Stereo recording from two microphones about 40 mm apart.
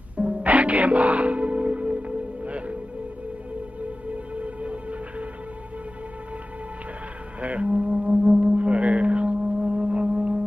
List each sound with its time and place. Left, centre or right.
0.2 s music: right
3.8 s music: right
7.4 s music: right